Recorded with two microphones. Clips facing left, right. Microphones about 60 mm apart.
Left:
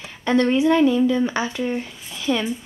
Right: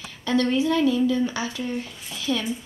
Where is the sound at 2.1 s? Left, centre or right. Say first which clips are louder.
Left 4 dB; left.